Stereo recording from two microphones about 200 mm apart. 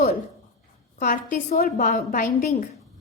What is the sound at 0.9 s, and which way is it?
A woman's voice, 40° left (ahead or behind).